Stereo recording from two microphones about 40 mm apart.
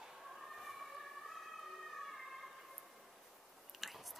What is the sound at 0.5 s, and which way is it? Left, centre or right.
Emergency vehicle, centre.